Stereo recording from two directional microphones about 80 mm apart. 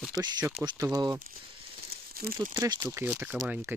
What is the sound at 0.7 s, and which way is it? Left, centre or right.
Speech, right.